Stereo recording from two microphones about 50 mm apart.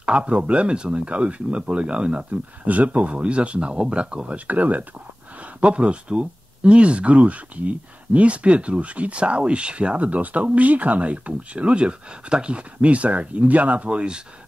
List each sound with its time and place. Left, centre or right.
0.0 s speech: right
4.5 s speech: right
5.6 s speech: right